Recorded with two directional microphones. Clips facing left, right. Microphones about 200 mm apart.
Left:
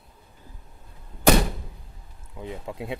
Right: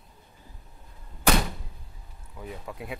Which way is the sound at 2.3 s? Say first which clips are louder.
Left 4 dB; 25° left (ahead or behind).